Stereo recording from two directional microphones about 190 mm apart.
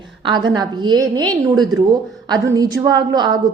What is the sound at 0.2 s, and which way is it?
A woman's voice, 25° right (ahead or behind).